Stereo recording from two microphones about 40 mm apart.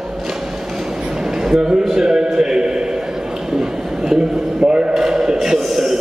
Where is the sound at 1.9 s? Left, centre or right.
Centre.